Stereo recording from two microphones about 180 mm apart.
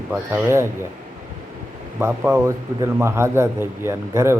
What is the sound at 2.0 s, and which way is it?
A man's voice, 15° right (ahead or behind).